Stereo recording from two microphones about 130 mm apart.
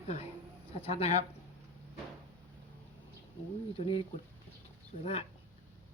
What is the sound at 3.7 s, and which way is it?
Speech, 45° left (ahead or behind).